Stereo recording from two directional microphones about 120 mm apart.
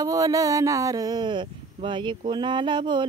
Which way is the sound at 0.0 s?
30° right (ahead or behind).